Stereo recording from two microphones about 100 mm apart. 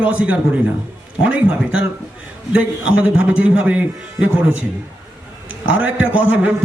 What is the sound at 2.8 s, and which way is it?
A man's voice, 15° right (ahead or behind).